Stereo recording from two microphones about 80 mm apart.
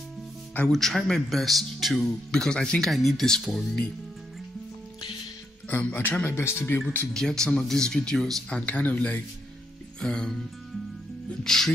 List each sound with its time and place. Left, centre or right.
0.7 s speech: centre
5.7 s speech: left
7.2 s speech: centre
9.9 s speech: centre
11.2 s music: centre